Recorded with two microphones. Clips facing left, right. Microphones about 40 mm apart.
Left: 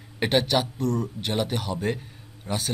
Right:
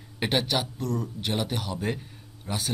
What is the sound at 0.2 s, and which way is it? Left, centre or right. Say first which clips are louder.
Speech: left 4 dB; centre.